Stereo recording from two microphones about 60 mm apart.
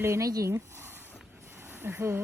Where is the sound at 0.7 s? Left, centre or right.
Right.